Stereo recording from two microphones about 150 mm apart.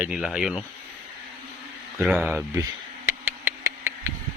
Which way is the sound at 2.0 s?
10° right (ahead or behind).